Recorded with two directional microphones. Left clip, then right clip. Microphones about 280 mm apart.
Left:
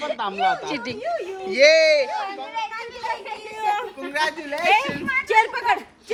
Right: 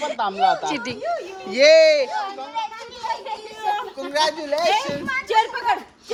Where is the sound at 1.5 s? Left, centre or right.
Right.